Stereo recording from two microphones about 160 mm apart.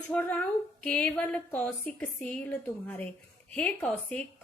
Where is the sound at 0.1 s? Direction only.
10° left (ahead or behind).